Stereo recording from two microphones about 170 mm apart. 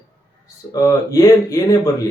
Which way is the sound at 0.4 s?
20° left (ahead or behind).